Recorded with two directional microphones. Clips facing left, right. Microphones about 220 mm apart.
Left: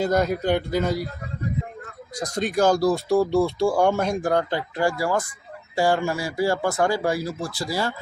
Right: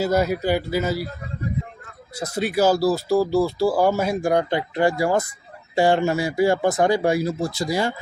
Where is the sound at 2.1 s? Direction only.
5° right (ahead or behind).